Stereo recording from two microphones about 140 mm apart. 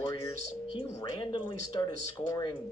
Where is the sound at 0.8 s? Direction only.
35° left (ahead or behind).